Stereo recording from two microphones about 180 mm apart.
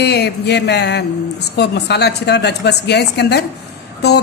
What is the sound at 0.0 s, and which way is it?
A man's voice, 65° left (ahead or behind).